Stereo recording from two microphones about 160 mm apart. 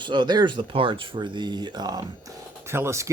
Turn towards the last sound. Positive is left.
turn(degrees=-20)  # may be behind; listen again after turning